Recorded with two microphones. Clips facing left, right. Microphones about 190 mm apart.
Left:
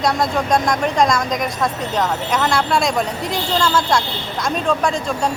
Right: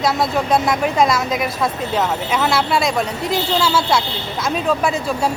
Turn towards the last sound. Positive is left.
turn(degrees=-5)  # may be behind; listen again after turning